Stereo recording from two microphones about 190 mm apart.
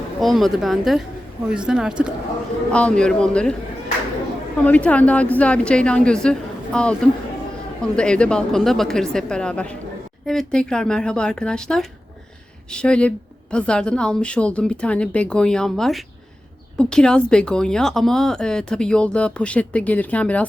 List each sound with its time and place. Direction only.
0.2 s a woman's voice: centre (ahead or behind)
4.5 s a woman's voice: 5° left (ahead or behind)